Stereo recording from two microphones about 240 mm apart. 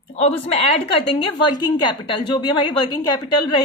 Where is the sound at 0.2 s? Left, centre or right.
Left.